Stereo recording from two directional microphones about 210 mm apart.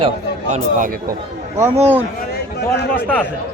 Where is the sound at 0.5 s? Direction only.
40° right (ahead or behind).